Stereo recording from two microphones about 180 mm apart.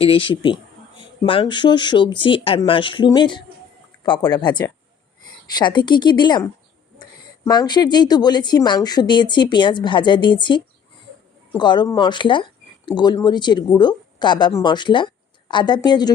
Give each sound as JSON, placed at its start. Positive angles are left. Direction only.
{"t": 0.0, "sound": "speech", "side_deg": 30}